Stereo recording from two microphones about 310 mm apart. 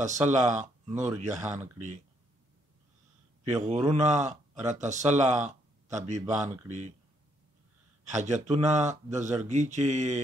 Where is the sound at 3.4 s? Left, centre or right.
Right.